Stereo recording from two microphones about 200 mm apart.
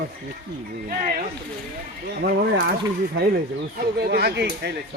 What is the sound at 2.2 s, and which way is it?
Speech, 45° right (ahead or behind).